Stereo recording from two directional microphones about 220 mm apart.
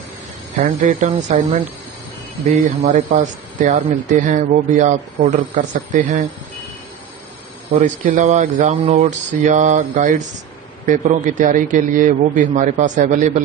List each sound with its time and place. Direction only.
0.6 s speech: 35° right (ahead or behind)
8.0 s speech: 35° right (ahead or behind)